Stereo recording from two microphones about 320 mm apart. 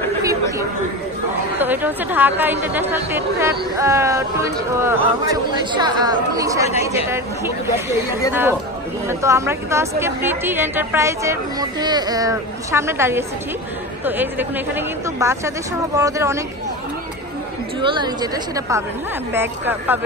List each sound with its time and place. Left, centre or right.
0.2 s chatter: centre
1.6 s a woman's voice: centre
17.7 s a woman's voice: centre